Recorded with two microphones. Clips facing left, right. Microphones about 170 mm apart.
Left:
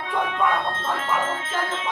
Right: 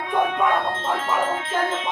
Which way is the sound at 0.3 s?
20° right (ahead or behind).